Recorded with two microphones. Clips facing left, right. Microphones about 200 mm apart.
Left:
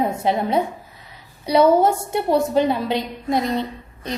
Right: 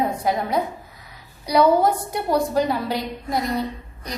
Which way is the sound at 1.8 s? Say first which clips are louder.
Left 2 dB; 25° left (ahead or behind).